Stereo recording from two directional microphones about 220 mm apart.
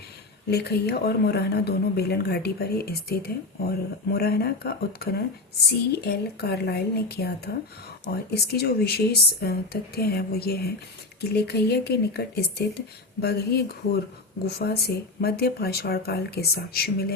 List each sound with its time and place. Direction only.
0.5 s speech: 45° left (ahead or behind)